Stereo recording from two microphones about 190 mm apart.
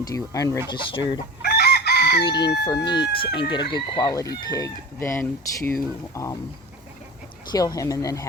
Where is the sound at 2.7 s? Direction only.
25° left (ahead or behind).